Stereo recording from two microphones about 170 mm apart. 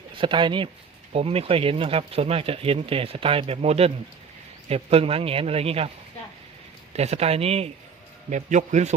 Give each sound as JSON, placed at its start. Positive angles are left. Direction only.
{"t": 0.2, "sound": "speech", "side_deg": -30}
{"t": 6.9, "sound": "a man's voice", "side_deg": -40}